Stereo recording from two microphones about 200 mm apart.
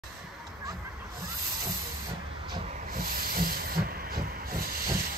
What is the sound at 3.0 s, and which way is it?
Hiss, 50° right (ahead or behind).